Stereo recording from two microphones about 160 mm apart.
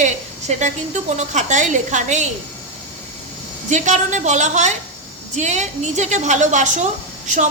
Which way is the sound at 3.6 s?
50° right (ahead or behind).